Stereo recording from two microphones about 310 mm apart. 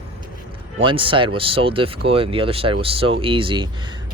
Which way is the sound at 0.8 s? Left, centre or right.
Centre.